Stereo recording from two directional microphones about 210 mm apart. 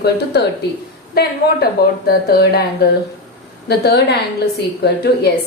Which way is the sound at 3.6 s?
50° left (ahead or behind).